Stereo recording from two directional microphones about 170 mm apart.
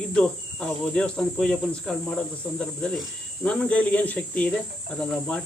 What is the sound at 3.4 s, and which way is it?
Speech, 5° left (ahead or behind).